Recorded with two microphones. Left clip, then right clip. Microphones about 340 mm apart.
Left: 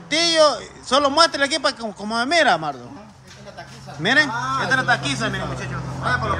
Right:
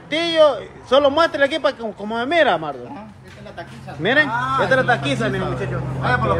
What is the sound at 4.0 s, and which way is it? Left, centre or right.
A man's voice, centre.